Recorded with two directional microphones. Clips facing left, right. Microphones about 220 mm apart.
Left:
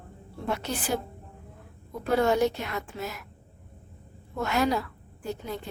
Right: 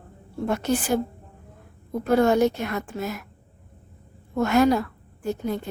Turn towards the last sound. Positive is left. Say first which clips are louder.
# right 7 dB
turn(degrees=-50)  # may be behind; listen again after turning